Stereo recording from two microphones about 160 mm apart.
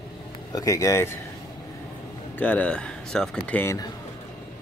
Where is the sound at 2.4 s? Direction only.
10° left (ahead or behind).